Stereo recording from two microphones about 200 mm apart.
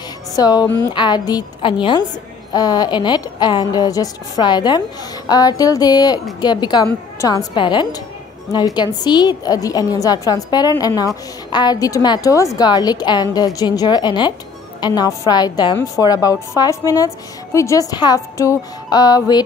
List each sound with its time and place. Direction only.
0.4 s a woman's voice: 20° left (ahead or behind)